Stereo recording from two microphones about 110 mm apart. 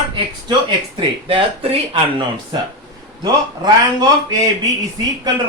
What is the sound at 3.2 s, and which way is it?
Speech, 40° right (ahead or behind).